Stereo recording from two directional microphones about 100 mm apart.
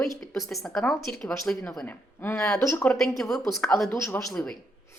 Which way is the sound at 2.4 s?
10° left (ahead or behind).